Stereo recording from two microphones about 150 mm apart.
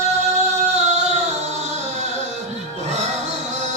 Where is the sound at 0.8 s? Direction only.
50° right (ahead or behind).